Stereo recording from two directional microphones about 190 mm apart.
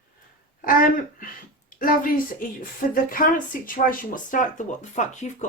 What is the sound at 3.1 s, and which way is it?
Speech, 45° left (ahead or behind).